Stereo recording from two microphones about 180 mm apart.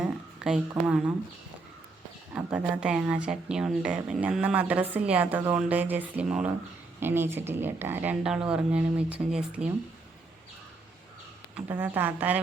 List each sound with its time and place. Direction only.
0.0 s a sound: 5° right (ahead or behind)
0.7 s speech: 5° right (ahead or behind)
2.3 s speech: 5° right (ahead or behind)
11.5 s speech: 10° right (ahead or behind)